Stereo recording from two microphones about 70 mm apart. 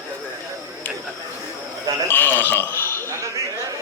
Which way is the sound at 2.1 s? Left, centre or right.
Left.